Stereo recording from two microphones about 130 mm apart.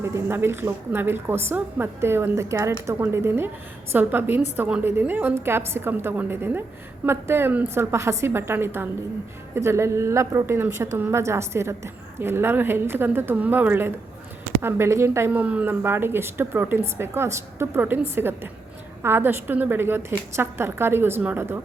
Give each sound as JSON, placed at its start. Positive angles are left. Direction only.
{"t": 0.0, "sound": "speech", "side_deg": -20}